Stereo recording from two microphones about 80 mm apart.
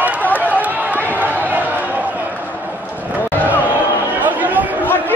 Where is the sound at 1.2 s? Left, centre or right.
Right.